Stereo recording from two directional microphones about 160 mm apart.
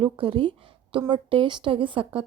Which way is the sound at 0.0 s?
35° right (ahead or behind).